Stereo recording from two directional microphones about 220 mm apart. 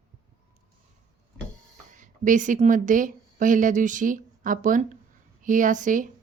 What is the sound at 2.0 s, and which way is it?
A woman's voice, 35° right (ahead or behind).